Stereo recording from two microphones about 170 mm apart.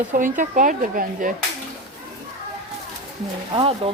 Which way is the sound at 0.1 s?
50° right (ahead or behind).